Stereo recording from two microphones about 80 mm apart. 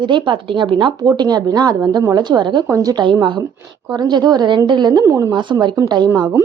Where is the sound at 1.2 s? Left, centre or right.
Right.